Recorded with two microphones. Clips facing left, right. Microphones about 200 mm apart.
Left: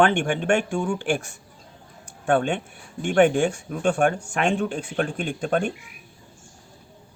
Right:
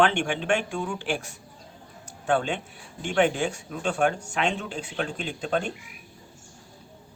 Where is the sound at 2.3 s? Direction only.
55° left (ahead or behind).